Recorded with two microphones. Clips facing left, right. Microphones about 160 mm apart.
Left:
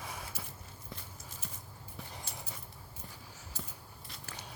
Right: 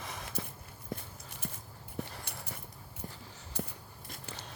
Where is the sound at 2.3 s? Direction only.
65° right (ahead or behind).